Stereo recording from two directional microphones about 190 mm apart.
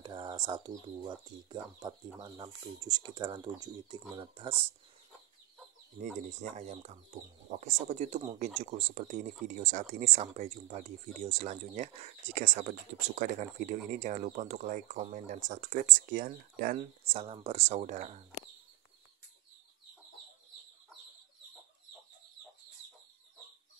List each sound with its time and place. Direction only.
0.0 s speech: 25° right (ahead or behind)
6.0 s speech: 5° left (ahead or behind)
6.5 s speech: 35° right (ahead or behind)
17.0 s speech: 30° right (ahead or behind)